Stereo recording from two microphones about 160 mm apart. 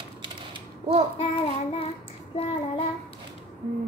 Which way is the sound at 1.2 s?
40° left (ahead or behind).